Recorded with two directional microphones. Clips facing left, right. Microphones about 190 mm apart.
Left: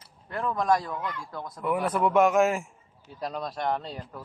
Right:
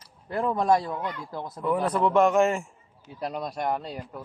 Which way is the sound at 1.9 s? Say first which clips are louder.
Even; 5° left (ahead or behind).